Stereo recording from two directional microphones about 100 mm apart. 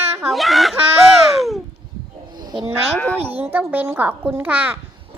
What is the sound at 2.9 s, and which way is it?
Speech, 15° left (ahead or behind).